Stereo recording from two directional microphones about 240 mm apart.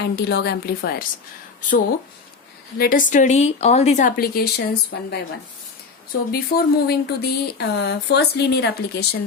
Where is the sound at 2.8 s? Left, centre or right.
Left.